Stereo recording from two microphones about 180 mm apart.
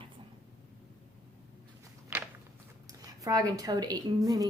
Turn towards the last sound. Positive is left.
turn(degrees=-20)  # may be behind; listen again after turning